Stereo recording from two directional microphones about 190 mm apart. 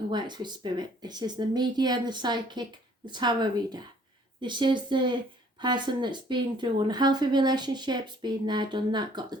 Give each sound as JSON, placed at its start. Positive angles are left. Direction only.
{"t": 0.1, "sound": "a woman's voice", "side_deg": -25}